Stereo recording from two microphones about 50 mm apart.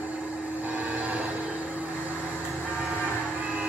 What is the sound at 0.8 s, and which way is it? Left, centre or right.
Train, right.